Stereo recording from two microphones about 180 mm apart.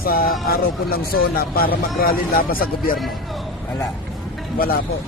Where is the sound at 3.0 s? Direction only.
Centre (ahead or behind).